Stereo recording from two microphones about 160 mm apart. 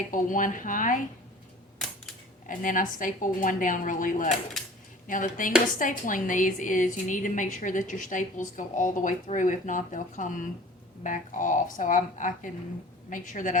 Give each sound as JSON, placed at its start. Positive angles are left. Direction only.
{"t": 0.1, "sound": "speech", "side_deg": 55}
{"t": 2.5, "sound": "a woman's voice", "side_deg": 55}